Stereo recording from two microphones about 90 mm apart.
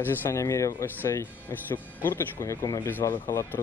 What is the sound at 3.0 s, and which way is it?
Speech, 40° left (ahead or behind).